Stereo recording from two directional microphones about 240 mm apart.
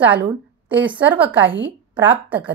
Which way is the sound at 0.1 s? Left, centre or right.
Centre.